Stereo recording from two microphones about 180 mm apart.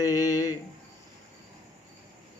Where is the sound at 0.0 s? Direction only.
20° left (ahead or behind).